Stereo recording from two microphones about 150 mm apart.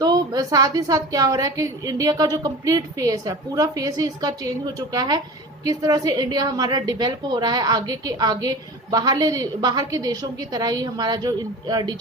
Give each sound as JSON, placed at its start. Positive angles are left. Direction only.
{"t": 0.0, "sound": "a woman's voice", "side_deg": -25}